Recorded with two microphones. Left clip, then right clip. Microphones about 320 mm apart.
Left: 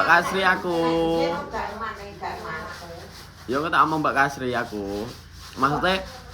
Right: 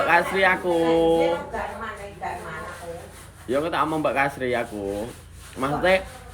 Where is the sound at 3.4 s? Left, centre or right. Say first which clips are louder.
Left 3 dB; centre.